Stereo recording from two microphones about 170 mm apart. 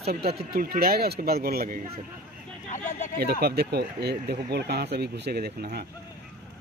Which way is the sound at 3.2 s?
70° right (ahead or behind).